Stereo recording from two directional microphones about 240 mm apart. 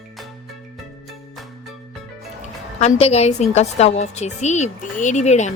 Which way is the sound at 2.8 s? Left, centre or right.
Left.